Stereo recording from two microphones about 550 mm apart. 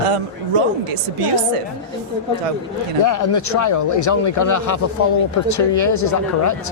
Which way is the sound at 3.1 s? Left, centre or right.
Left.